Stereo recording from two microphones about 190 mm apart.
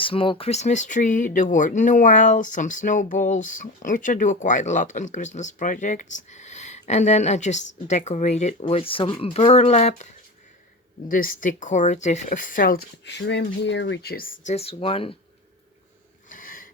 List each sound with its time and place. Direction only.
0.0 s speech: 30° left (ahead or behind)
11.1 s speech: 45° left (ahead or behind)
14.5 s speech: 30° left (ahead or behind)
16.3 s a sound: 45° left (ahead or behind)